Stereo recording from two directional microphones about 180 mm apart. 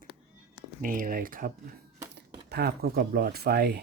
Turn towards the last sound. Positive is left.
turn(degrees=-65)  # may be behind; listen again after turning